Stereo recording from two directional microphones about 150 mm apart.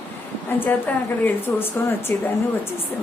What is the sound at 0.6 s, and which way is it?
A woman's voice, 15° left (ahead or behind).